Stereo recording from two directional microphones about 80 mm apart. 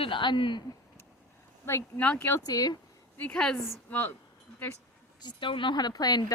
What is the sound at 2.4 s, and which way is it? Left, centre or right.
Speech, left.